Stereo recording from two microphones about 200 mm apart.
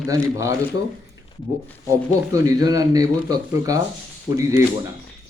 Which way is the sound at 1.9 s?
15° right (ahead or behind).